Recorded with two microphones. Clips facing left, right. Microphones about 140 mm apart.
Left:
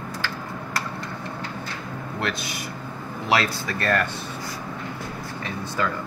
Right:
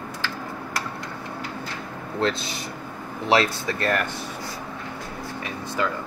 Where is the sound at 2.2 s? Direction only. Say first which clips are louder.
Right 5 dB; 25° right (ahead or behind).